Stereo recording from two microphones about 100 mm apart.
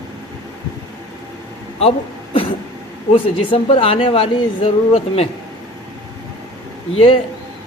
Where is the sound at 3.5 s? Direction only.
65° left (ahead or behind); by 5.3 s 90° left.